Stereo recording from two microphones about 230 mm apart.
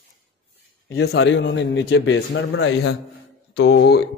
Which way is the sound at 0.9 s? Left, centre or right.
Left.